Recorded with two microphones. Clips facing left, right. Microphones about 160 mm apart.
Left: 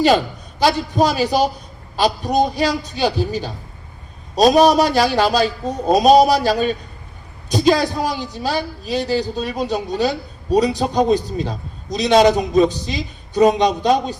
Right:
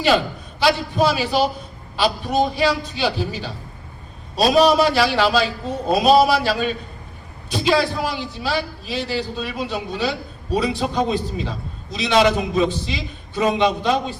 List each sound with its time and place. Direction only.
0.6 s a man's voice: 40° left (ahead or behind)